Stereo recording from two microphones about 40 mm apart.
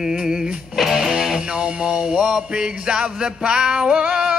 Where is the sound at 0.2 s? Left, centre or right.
Centre.